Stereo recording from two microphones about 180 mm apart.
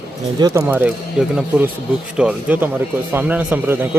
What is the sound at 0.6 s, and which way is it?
A man's voice, 10° right (ahead or behind).